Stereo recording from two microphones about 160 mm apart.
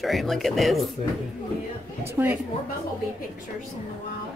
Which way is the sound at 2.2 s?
15° right (ahead or behind).